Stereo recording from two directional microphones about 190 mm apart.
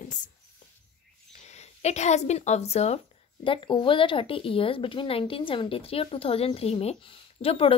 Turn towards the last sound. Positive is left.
turn(degrees=30)  # may be behind; listen again after turning